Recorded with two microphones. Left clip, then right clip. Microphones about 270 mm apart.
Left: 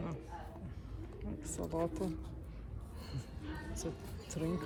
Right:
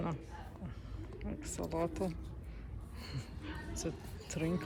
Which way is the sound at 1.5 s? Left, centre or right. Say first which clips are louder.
Even; centre.